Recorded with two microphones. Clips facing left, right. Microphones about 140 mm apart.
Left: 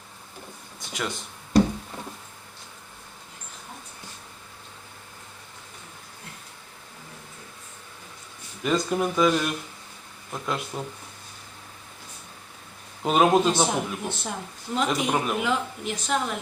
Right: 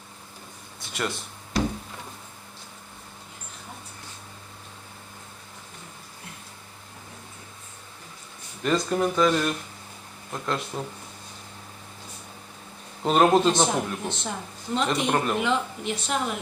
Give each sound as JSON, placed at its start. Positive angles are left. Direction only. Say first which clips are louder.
{"t": 0.8, "sound": "a sound", "louder": "right 1 dB", "side_deg": 0}
{"t": 8.6, "sound": "speech", "louder": "right 1 dB", "side_deg": 5}
{"t": 13.1, "sound": "speech", "louder": "right 1 dB", "side_deg": 5}